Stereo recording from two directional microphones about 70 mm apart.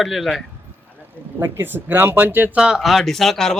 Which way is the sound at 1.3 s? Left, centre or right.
Right.